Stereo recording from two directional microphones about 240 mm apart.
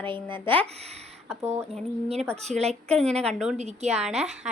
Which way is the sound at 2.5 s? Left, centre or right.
Right.